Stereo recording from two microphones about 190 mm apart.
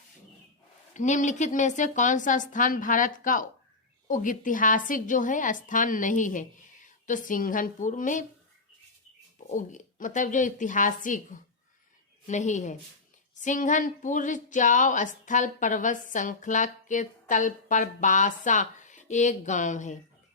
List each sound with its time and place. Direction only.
0.9 s a woman's voice: 40° left (ahead or behind)
9.5 s a woman's voice: 40° left (ahead or behind)